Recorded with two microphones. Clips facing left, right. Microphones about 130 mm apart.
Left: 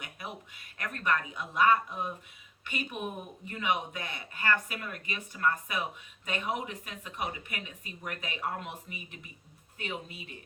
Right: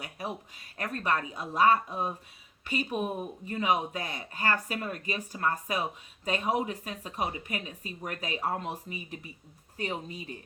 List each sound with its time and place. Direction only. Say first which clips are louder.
0.0 s speech: right 5 dB; 35° right (ahead or behind)